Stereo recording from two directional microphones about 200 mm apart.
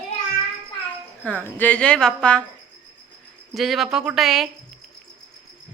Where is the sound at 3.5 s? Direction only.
Centre (ahead or behind).